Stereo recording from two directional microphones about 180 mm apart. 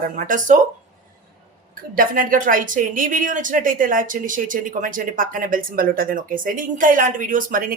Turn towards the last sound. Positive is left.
turn(degrees=-50)  # may be behind; listen again after turning